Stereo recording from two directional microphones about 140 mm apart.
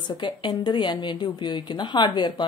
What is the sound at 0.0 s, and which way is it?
Speech, 35° left (ahead or behind).